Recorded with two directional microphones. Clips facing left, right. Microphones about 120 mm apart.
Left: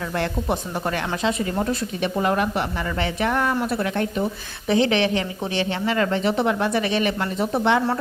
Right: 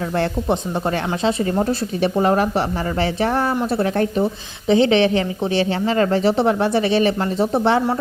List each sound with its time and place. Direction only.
0.2 s speech: 30° right (ahead or behind)